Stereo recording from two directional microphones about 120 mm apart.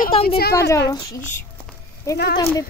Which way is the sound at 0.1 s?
50° left (ahead or behind).